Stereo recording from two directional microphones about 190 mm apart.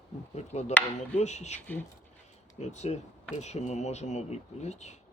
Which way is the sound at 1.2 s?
35° left (ahead or behind).